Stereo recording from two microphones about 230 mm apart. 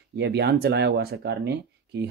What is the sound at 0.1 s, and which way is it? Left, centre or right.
Speech, right.